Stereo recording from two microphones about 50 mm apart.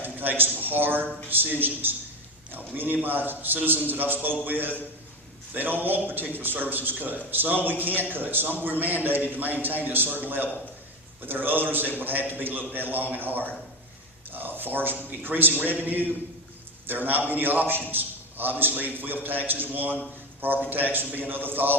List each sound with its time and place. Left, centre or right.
0.0 s a man's voice: right